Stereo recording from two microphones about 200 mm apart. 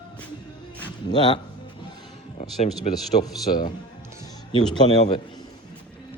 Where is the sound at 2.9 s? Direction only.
35° left (ahead or behind).